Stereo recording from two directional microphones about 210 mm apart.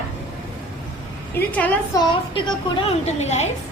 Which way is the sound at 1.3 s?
5° left (ahead or behind).